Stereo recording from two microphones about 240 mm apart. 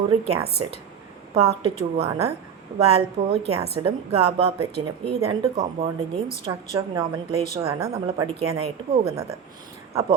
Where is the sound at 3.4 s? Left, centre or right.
Right.